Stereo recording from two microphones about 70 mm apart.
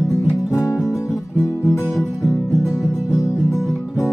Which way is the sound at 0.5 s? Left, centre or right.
Left.